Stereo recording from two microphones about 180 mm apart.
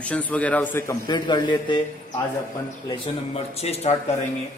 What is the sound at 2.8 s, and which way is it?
Speech, 35° left (ahead or behind).